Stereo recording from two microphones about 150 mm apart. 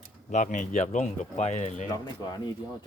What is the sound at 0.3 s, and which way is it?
Speech, 55° left (ahead or behind).